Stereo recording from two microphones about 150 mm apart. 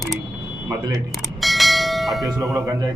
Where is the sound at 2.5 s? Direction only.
20° right (ahead or behind).